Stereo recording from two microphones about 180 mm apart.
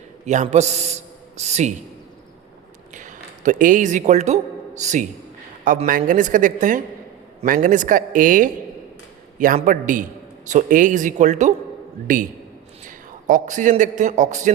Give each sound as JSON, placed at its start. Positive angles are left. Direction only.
{"t": 0.4, "sound": "a man's voice", "side_deg": -40}
{"t": 2.9, "sound": "a man's voice", "side_deg": -45}
{"t": 9.6, "sound": "a man's voice", "side_deg": -45}